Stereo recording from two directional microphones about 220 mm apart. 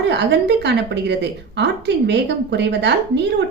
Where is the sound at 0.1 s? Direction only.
50° right (ahead or behind).